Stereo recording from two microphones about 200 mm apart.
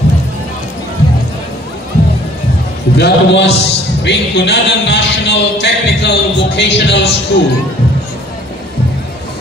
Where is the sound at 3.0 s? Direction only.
60° left (ahead or behind).